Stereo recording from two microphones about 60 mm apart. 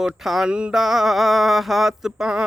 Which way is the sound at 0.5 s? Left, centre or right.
Centre.